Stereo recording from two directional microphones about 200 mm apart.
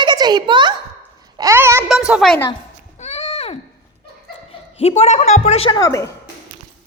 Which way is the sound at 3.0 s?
35° left (ahead or behind).